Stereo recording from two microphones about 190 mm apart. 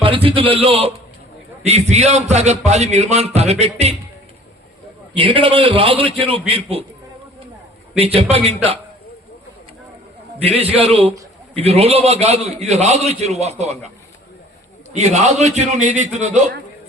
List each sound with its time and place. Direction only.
0.0 s a man's voice: 30° right (ahead or behind)
5.1 s a man's voice: 30° right (ahead or behind)
7.9 s a man's voice: 30° right (ahead or behind)
10.4 s a man's voice: 30° right (ahead or behind)
14.9 s a man's voice: 35° right (ahead or behind)